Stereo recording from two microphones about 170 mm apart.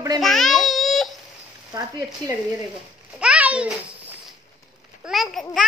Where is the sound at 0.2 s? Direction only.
Centre (ahead or behind).